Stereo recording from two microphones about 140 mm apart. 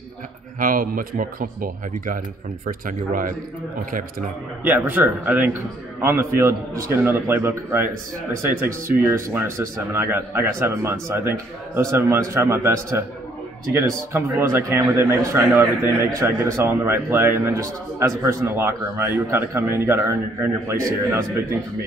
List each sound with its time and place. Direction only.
0.6 s a man's voice: 80° right
4.6 s a man's voice: 15° right (ahead or behind)